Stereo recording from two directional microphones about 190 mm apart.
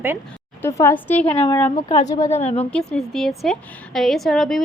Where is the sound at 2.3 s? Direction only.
35° left (ahead or behind).